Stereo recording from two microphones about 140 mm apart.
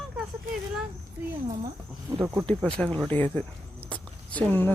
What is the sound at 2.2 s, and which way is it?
Speech, 15° right (ahead or behind).